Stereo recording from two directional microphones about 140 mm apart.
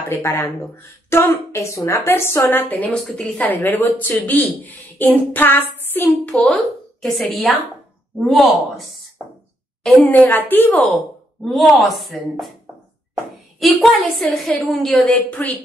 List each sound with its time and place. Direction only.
0.1 s a woman's voice: 20° left (ahead or behind); by 8.8 s centre (ahead or behind)
9.8 s a woman's voice: 10° left (ahead or behind)
11.4 s a woman's voice: centre (ahead or behind)
13.6 s a woman's voice: centre (ahead or behind)